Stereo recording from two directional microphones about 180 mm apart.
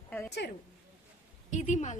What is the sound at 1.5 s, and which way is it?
Speech, 40° left (ahead or behind).